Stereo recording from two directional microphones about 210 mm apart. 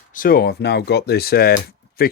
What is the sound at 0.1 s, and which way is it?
Speech, 40° left (ahead or behind).